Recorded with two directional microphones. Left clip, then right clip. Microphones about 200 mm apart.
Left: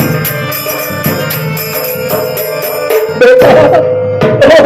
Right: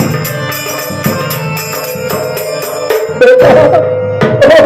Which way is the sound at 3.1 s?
25° left (ahead or behind).